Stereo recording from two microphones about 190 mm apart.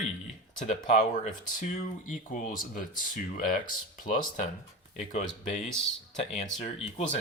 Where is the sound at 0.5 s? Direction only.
40° left (ahead or behind).